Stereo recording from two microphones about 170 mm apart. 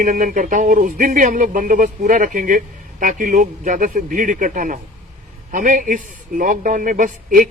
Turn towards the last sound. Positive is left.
turn(degrees=-50)  # may be behind; listen again after turning